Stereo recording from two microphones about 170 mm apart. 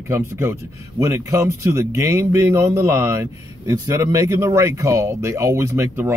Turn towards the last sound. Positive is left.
turn(degrees=-15)  # may be behind; listen again after turning